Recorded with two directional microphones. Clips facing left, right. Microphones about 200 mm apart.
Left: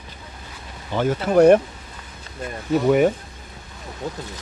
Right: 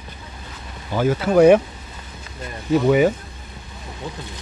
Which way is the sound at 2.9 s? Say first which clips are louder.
Even; centre (ahead or behind).